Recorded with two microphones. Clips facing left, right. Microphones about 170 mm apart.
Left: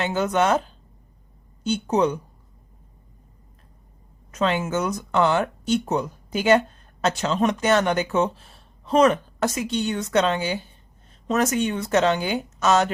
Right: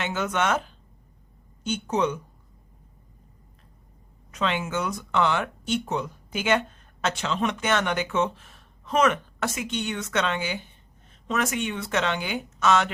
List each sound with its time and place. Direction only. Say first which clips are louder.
0.0 s speech: left 5 dB; 35° left (ahead or behind)
1.6 s speech: left 4 dB; 35° left (ahead or behind)
4.3 s speech: left 4 dB; 40° left (ahead or behind)